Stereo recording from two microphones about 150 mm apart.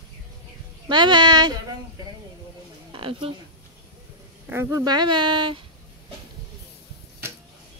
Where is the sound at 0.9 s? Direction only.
30° right (ahead or behind).